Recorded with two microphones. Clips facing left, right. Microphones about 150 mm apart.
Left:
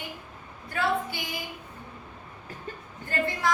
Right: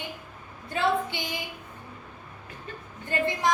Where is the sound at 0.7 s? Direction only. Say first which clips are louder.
Right 2 dB; 25° right (ahead or behind).